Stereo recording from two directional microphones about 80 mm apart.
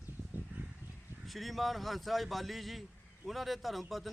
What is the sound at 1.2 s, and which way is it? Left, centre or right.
Speech, centre.